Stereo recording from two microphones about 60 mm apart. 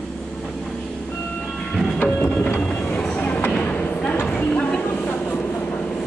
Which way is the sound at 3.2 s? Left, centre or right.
Left.